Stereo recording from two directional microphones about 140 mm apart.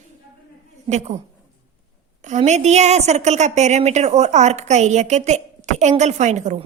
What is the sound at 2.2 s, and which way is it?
A woman's voice, 60° right (ahead or behind).